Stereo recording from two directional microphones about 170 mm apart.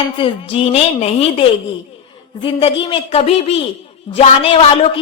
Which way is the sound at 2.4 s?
30° left (ahead or behind).